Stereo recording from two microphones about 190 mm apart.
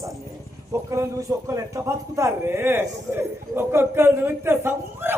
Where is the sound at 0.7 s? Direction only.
15° right (ahead or behind).